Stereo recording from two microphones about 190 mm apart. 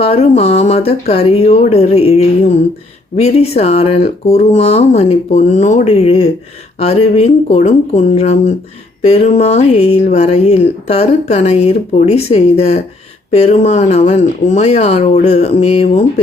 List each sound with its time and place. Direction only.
0.0 s speech: 30° left (ahead or behind)